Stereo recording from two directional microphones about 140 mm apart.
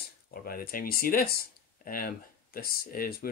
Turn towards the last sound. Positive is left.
turn(degrees=90)